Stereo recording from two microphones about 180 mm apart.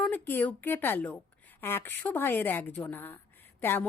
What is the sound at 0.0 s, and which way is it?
Speech, 10° left (ahead or behind).